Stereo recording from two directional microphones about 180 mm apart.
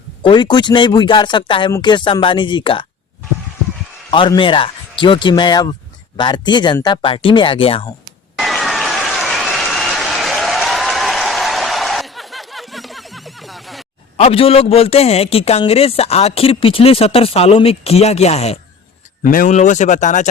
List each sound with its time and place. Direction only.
0.2 s speech: 25° left (ahead or behind)
4.1 s speech: 25° left (ahead or behind)
8.4 s applause: centre (ahead or behind)
14.2 s a man's voice: 30° left (ahead or behind)
19.2 s speech: 50° left (ahead or behind)